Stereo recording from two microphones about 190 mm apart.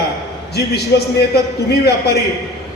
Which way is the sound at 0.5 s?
60° left (ahead or behind).